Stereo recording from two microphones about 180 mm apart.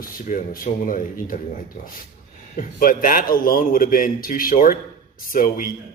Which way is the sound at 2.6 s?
50° left (ahead or behind).